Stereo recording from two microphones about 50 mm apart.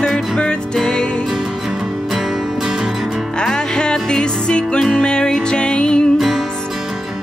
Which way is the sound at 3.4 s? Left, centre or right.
Centre.